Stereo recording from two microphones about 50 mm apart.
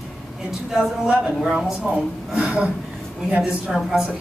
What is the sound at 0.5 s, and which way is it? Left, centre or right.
Speech, centre.